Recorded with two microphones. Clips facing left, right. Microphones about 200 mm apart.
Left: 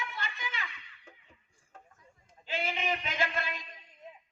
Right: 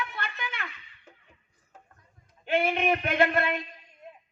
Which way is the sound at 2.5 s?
60° right (ahead or behind).